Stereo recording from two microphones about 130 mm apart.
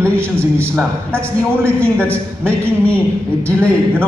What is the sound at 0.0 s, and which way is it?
A man's voice, 15° right (ahead or behind).